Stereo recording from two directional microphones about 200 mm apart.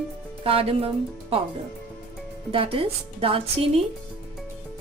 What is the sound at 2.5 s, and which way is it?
A woman's voice, 30° right (ahead or behind).